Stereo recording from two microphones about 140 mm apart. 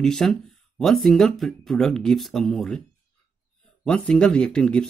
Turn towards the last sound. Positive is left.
turn(degrees=5)  # may be behind; listen again after turning